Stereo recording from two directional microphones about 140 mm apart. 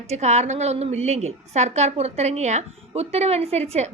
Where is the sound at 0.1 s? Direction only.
50° right (ahead or behind).